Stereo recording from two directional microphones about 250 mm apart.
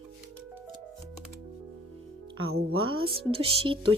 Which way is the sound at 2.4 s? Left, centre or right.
Right.